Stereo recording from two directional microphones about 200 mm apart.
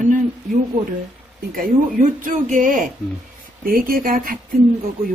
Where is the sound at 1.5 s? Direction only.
40° right (ahead or behind).